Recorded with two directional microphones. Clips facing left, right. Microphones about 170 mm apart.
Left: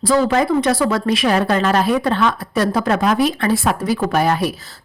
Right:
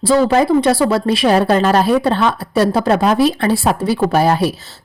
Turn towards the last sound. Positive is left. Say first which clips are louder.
# right 3 dB
turn(degrees=-30)  # may be behind; listen again after turning